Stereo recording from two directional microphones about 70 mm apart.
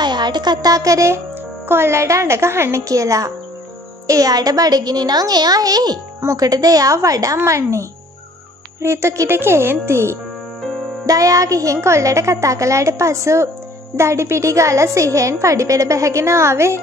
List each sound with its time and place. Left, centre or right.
0.0 s a woman's voice: right
7.3 s a woman's voice: right
8.8 s speech: right
11.1 s a woman's voice: right